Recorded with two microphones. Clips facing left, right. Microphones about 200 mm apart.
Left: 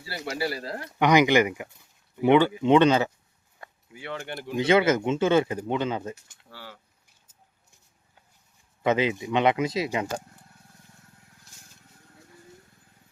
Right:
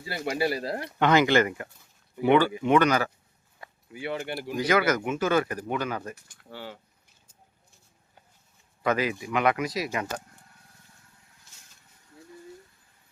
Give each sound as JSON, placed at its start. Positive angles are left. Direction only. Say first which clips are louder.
{"t": 0.3, "sound": "speech", "louder": "right 3 dB", "side_deg": -15}
{"t": 0.9, "sound": "speech", "louder": "left 2 dB", "side_deg": 15}
{"t": 3.9, "sound": "speech", "louder": "right 3 dB", "side_deg": -10}
{"t": 4.5, "sound": "speech", "louder": "left 3 dB", "side_deg": 25}
{"t": 6.5, "sound": "speech", "louder": "right 5 dB", "side_deg": -20}
{"t": 8.8, "sound": "speech", "louder": "left 3 dB", "side_deg": 25}